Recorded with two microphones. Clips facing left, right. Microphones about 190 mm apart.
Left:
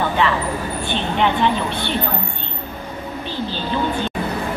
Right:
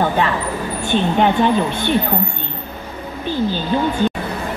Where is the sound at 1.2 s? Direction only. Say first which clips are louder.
Right 1 dB; 45° right (ahead or behind).